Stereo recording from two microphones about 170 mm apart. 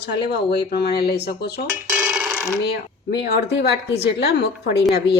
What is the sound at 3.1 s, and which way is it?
A woman's voice, 80° left.